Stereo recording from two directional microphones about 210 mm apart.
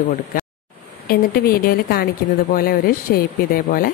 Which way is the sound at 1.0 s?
45° left (ahead or behind).